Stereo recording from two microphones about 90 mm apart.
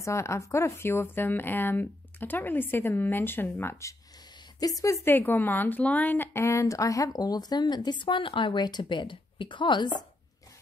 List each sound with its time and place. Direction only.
0.0 s speech: 30° left (ahead or behind)
4.6 s speech: 40° left (ahead or behind); by 10.0 s 55° left (ahead or behind)